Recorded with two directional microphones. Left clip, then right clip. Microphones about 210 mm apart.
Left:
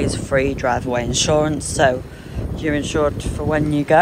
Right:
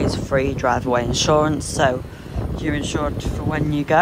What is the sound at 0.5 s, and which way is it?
Speech, 15° right (ahead or behind).